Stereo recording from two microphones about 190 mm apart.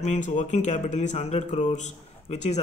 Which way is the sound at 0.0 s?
40° left (ahead or behind).